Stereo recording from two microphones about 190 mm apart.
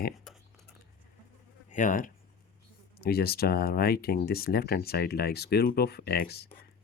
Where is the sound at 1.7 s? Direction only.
45° left (ahead or behind).